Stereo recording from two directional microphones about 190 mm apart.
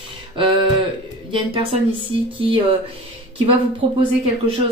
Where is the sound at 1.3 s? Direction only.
30° right (ahead or behind).